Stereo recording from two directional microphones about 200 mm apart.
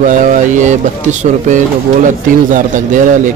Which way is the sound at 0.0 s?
40° right (ahead or behind).